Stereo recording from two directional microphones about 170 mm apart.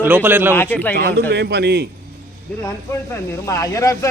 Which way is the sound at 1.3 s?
80° right.